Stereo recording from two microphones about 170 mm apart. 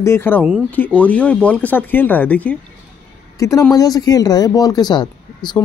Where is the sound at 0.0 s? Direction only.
15° left (ahead or behind).